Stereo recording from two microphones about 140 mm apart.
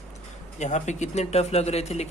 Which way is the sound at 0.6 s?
60° left (ahead or behind).